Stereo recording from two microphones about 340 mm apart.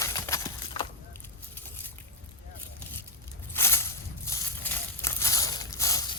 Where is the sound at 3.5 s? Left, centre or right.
Centre.